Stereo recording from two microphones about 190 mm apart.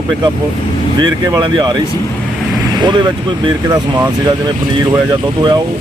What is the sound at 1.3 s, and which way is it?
Speech, 20° right (ahead or behind).